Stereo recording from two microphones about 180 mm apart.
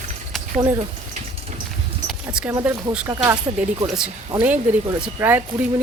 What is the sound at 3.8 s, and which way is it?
Speech, 5° right (ahead or behind).